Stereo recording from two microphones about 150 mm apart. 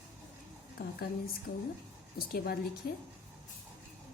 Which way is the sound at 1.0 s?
85° left.